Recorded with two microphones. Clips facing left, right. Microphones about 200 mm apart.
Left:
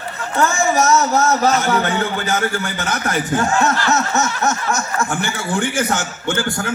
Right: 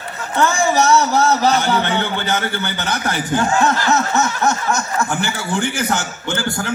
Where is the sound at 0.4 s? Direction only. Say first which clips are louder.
Right 1 dB; 30° right (ahead or behind).